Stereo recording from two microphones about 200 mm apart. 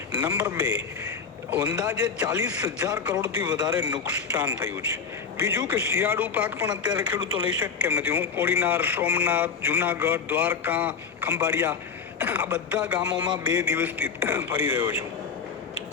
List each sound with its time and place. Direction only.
0.1 s a man's voice: 10° right (ahead or behind)